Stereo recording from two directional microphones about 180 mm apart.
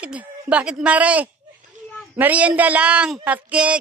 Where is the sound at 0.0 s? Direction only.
5° right (ahead or behind).